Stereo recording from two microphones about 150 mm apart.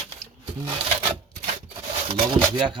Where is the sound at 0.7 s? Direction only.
35° right (ahead or behind).